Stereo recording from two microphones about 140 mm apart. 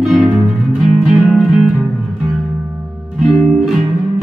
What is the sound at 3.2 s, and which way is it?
Music, centre (ahead or behind).